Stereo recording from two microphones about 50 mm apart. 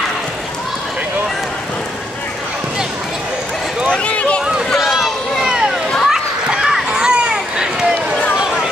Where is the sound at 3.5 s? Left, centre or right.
Centre.